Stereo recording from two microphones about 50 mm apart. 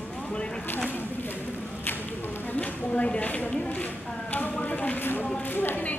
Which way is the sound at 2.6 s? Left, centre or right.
Left.